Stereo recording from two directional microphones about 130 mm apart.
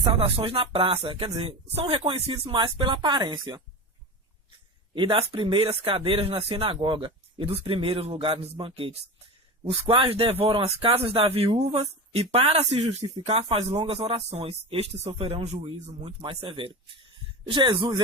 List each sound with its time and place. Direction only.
0.1 s speech: 45° right (ahead or behind)
4.9 s speech: 40° right (ahead or behind)